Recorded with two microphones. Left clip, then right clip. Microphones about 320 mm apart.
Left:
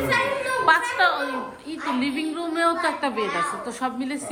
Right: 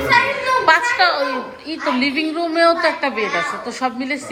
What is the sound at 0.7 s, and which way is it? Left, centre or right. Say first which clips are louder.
A woman's voice: right 4 dB; centre.